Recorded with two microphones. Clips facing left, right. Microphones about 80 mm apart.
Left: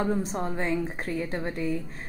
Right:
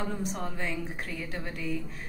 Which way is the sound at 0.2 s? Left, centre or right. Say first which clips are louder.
Left 4 dB; left.